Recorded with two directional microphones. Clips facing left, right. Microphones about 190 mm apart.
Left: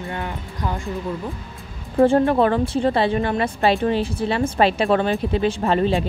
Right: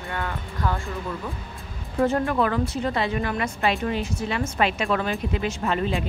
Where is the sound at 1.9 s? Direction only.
30° left (ahead or behind).